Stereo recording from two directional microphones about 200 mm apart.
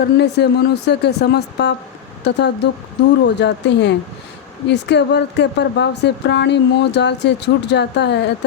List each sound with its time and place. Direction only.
0.2 s speech: 55° left (ahead or behind)